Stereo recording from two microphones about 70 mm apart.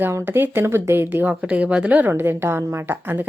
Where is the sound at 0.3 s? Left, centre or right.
Right.